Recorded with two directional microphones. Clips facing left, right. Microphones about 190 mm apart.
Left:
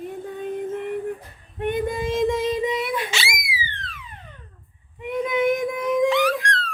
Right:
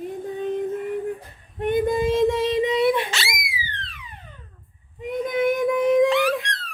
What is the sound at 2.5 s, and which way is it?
Child singing, 25° right (ahead or behind).